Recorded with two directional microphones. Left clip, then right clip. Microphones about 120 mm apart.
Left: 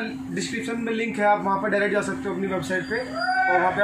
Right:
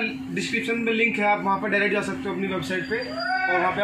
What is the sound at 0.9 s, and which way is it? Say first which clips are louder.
A man's voice: left 1 dB; 20° right (ahead or behind).